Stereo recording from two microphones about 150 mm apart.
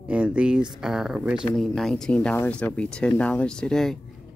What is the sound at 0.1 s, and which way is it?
Speech, 5° right (ahead or behind).